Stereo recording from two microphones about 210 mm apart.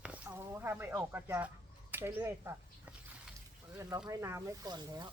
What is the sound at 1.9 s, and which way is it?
Speech, 10° right (ahead or behind).